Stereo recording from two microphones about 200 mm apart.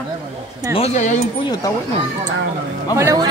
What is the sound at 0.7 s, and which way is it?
Speech, 35° left (ahead or behind).